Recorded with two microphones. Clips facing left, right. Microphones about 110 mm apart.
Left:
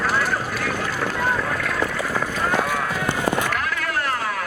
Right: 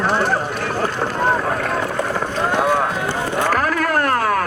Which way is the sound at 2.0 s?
25° right (ahead or behind).